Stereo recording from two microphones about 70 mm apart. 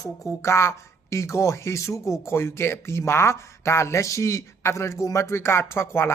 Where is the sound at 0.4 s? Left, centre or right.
Left.